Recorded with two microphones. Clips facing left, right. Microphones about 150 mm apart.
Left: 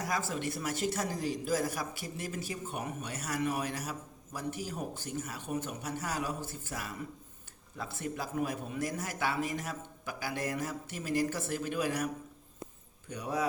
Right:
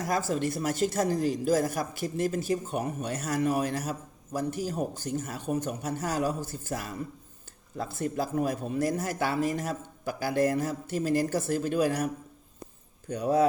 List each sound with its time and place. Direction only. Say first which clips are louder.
0.0 s speech: right 6 dB; 40° right (ahead or behind)
13.1 s speech: right 10 dB; 45° right (ahead or behind)